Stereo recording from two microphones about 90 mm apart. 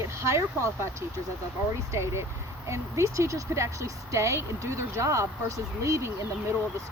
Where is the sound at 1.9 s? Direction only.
30° right (ahead or behind).